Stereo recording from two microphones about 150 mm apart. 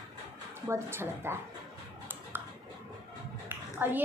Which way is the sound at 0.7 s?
15° right (ahead or behind).